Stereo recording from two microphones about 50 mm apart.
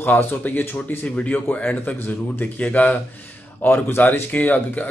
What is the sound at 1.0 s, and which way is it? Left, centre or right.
Speech, left.